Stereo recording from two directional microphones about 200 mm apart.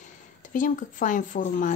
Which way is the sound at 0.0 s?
40° left (ahead or behind).